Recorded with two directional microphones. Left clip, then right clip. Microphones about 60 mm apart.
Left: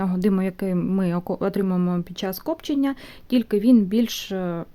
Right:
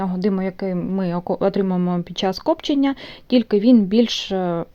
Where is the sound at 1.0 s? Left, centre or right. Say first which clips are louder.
Right 2 dB; left.